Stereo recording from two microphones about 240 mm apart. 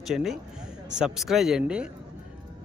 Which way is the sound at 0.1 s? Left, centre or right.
Centre.